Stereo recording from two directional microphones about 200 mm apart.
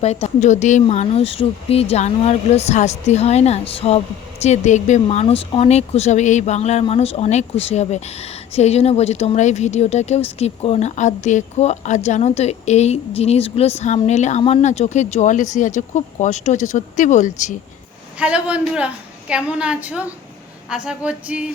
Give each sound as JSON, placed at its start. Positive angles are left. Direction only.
{"t": 0.0, "sound": "speech", "side_deg": 35}
{"t": 18.2, "sound": "a man's voice", "side_deg": -5}
{"t": 19.3, "sound": "a sound", "side_deg": -5}